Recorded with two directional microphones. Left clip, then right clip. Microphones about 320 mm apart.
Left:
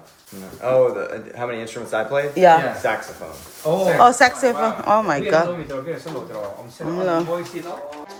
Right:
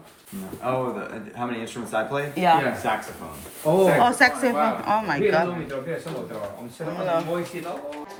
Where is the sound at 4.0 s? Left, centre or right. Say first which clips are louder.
Left 5 dB; centre.